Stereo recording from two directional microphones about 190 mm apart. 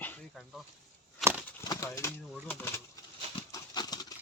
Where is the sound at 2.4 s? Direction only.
10° left (ahead or behind).